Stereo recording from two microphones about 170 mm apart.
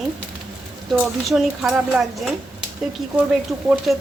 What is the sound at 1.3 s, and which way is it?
A woman's voice, centre (ahead or behind).